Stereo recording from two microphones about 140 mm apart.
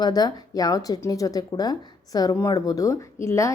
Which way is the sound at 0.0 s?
30° left (ahead or behind).